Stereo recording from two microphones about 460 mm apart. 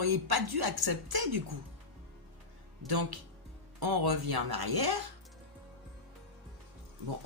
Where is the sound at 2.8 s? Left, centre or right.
Right.